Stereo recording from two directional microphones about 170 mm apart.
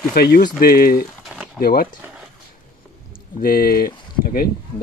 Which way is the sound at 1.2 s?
5° right (ahead or behind).